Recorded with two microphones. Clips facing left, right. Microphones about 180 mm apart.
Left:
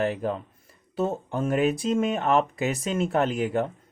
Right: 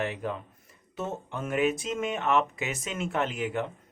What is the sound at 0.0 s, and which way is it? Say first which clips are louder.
Speech: left 5 dB; 35° left (ahead or behind).